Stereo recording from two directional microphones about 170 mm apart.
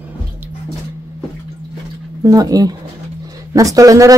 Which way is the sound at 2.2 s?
20° right (ahead or behind).